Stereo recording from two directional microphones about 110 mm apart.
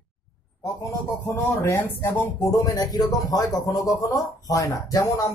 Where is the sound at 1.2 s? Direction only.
25° left (ahead or behind).